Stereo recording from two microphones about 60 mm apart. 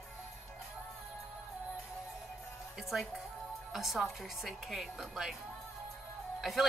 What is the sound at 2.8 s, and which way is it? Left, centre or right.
Speech, centre.